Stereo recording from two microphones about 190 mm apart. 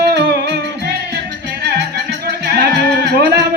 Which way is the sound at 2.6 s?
60° right (ahead or behind).